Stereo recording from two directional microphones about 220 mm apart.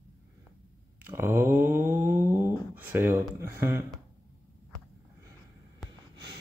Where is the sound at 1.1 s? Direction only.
10° right (ahead or behind).